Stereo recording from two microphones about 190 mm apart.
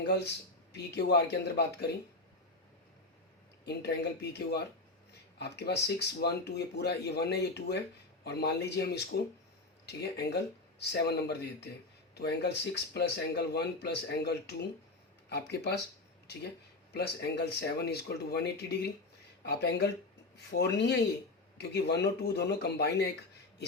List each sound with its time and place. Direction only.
0.7 s speech: 60° left (ahead or behind)
3.7 s speech: 60° left (ahead or behind)